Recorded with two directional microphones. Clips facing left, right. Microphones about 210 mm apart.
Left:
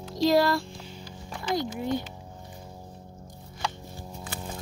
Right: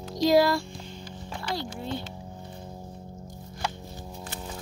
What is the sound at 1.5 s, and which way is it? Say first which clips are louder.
Speech: left 6 dB; 15° left (ahead or behind).